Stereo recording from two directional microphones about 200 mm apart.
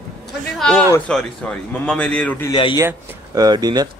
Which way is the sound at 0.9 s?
5° left (ahead or behind).